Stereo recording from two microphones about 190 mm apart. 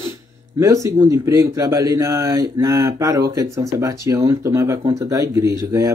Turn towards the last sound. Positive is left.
turn(degrees=-15)  # may be behind; listen again after turning